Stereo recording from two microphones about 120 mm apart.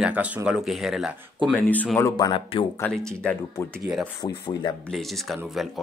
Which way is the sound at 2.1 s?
35° left (ahead or behind).